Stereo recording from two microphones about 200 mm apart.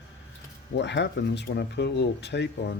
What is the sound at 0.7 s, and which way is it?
Speech, 60° left (ahead or behind).